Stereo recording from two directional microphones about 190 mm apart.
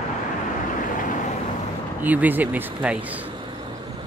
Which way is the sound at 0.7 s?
45° left (ahead or behind).